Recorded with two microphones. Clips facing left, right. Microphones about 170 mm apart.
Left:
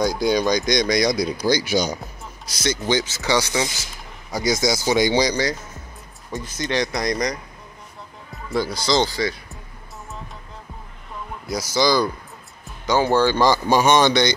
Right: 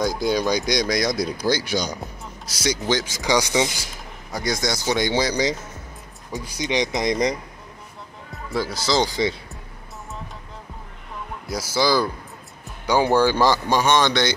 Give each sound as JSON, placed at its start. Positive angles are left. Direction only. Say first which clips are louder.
{"t": 0.0, "sound": "speech", "louder": "left 2 dB", "side_deg": -5}
{"t": 2.4, "sound": "speech", "louder": "even", "side_deg": -10}
{"t": 4.3, "sound": "speech", "louder": "left 4 dB", "side_deg": 0}
{"t": 6.3, "sound": "speech", "louder": "even", "side_deg": -15}
{"t": 8.5, "sound": "speech", "louder": "left 2 dB", "side_deg": -5}
{"t": 9.1, "sound": "speech", "louder": "right 1 dB", "side_deg": -20}
{"t": 11.4, "sound": "speech", "louder": "left 2 dB", "side_deg": -5}
{"t": 13.7, "sound": "a man's voice", "louder": "left 3 dB", "side_deg": 10}